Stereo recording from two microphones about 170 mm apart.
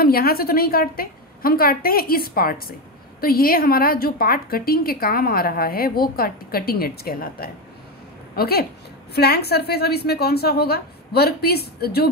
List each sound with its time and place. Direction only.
0.0 s a woman's voice: 60° left (ahead or behind)